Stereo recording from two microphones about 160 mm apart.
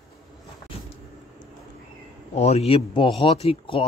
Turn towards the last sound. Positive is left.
turn(degrees=35)  # may be behind; listen again after turning